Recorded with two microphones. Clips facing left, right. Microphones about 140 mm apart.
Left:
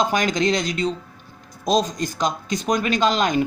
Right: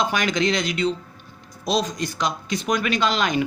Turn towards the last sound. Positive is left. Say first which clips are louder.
# left 2 dB
turn(degrees=45)  # may be behind; listen again after turning